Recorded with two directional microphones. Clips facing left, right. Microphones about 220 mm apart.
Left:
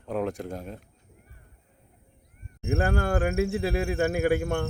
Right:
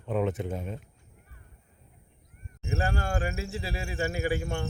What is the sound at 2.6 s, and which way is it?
Speech, 55° left (ahead or behind).